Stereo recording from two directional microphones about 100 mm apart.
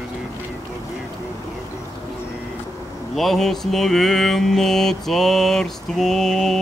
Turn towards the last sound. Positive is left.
turn(degrees=5)  # may be behind; listen again after turning